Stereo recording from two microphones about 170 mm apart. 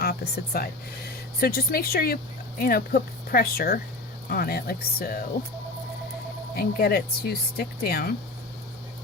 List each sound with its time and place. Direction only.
0.0 s speech: 65° left (ahead or behind)
6.6 s speech: 65° left (ahead or behind)